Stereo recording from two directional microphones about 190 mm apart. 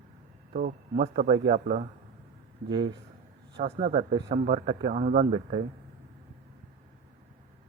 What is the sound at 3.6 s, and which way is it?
A man's voice, 35° right (ahead or behind).